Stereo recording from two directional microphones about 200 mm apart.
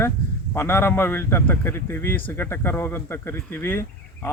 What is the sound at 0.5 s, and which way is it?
Speech, 10° left (ahead or behind).